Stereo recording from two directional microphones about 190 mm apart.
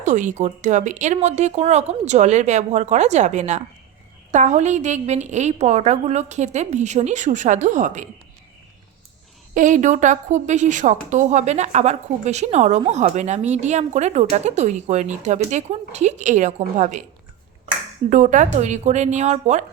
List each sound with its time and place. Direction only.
0.0 s a woman's voice: 40° right (ahead or behind)
9.6 s a woman's voice: 40° right (ahead or behind)
18.1 s a woman's voice: 40° right (ahead or behind)